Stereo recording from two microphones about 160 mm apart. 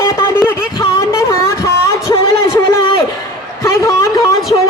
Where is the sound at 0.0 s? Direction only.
15° left (ahead or behind).